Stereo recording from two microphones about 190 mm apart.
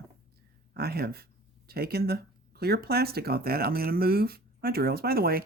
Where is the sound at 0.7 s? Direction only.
55° right (ahead or behind).